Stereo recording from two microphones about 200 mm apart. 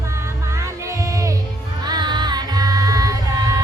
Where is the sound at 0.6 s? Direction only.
15° right (ahead or behind).